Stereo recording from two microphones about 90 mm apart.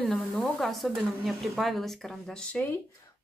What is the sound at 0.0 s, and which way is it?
Speech, 10° left (ahead or behind).